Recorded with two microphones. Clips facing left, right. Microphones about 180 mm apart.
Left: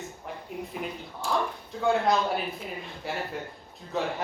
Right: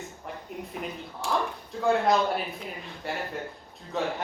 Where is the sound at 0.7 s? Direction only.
Centre (ahead or behind).